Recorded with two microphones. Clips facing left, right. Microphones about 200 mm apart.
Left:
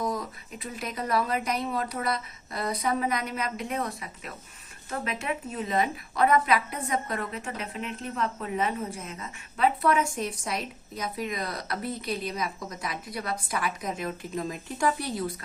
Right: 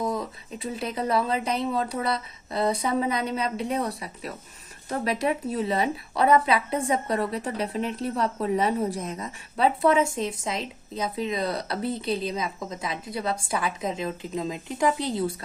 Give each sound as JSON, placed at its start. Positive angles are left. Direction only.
{"t": 0.0, "sound": "speech", "side_deg": -25}